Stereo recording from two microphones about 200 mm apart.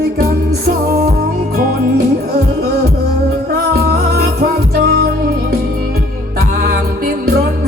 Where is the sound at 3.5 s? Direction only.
50° right (ahead or behind).